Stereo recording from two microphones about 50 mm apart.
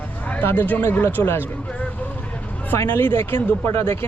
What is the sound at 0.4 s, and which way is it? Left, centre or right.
Speech, left.